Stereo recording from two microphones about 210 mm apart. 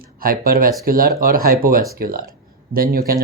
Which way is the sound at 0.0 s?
45° right (ahead or behind).